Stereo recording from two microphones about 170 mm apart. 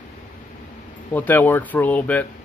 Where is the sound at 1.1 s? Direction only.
10° left (ahead or behind).